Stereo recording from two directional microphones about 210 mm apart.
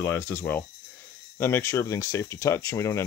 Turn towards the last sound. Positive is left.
turn(degrees=15)  # may be behind; listen again after turning